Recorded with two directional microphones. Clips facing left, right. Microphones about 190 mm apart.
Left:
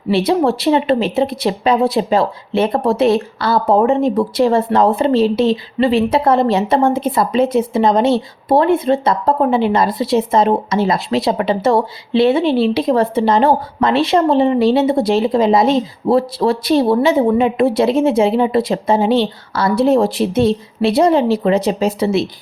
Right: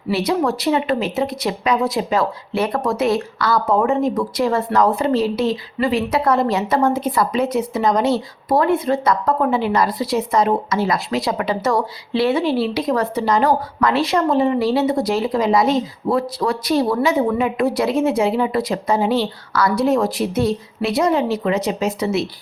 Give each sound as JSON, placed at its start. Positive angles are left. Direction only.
{"t": 0.3, "sound": "a woman's voice", "side_deg": 30}